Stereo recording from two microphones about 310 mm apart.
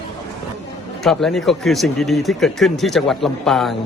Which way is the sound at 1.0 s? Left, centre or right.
Centre.